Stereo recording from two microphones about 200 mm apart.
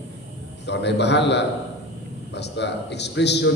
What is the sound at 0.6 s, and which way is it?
A man's voice, 60° left (ahead or behind).